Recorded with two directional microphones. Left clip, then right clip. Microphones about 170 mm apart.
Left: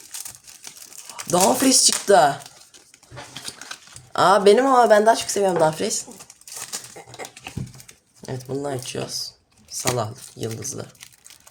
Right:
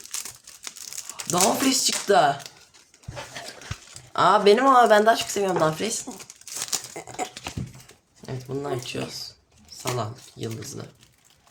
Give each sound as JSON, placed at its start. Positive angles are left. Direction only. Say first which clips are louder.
{"t": 1.1, "sound": "speech", "louder": "left 4 dB", "side_deg": 40}
{"t": 4.1, "sound": "speech", "louder": "left 3 dB", "side_deg": 35}
{"t": 4.5, "sound": "speech", "louder": "left 1 dB", "side_deg": 25}
{"t": 8.3, "sound": "speech", "louder": "left 2 dB", "side_deg": 35}